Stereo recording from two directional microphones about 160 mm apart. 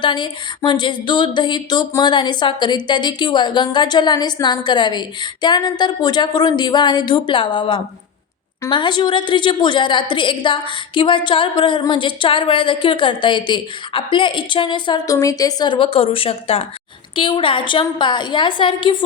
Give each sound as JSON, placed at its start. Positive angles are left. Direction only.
{"t": 0.0, "sound": "a woman's voice", "side_deg": 30}